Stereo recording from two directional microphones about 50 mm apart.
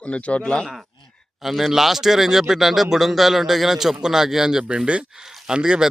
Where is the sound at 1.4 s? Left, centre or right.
Centre.